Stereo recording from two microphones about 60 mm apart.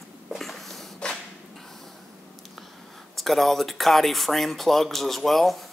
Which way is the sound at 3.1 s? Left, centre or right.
Centre.